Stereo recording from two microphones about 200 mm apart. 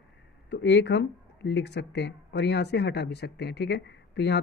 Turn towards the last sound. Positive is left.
turn(degrees=55)  # may be behind; listen again after turning